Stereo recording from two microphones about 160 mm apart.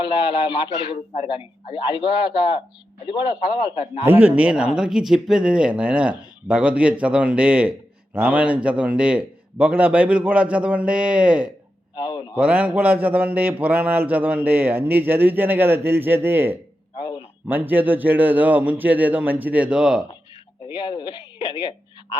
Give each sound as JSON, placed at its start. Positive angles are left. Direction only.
{"t": 0.5, "sound": "a man's voice", "side_deg": 30}
{"t": 4.0, "sound": "a man's voice", "side_deg": -10}
{"t": 11.9, "sound": "a man's voice", "side_deg": 25}
{"t": 12.4, "sound": "a man's voice", "side_deg": -10}
{"t": 20.7, "sound": "speech", "side_deg": 30}